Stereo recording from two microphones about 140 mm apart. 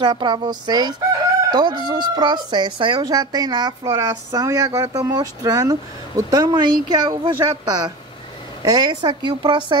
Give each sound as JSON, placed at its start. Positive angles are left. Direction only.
{"t": 0.0, "sound": "speech", "side_deg": -30}